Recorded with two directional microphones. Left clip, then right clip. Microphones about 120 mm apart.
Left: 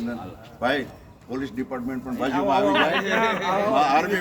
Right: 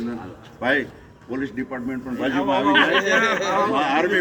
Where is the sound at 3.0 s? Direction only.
Centre (ahead or behind).